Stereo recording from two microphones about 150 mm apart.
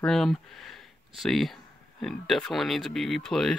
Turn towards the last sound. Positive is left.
turn(degrees=5)  # may be behind; listen again after turning